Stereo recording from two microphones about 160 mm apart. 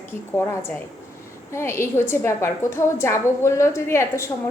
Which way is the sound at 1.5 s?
15° left (ahead or behind).